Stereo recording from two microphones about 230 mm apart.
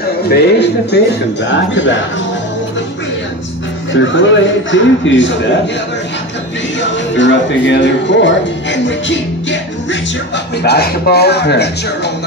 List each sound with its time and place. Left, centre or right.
0.3 s speech: left
3.9 s speech: left
6.8 s speech: left